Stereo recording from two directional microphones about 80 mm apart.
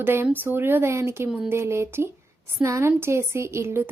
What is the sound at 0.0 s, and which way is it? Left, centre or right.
A woman's voice, right.